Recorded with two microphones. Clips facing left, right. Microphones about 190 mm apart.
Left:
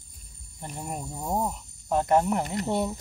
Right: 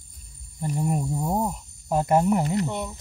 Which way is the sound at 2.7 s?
30° left (ahead or behind).